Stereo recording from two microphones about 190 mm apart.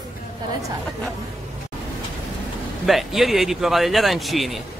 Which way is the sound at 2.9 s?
Centre (ahead or behind).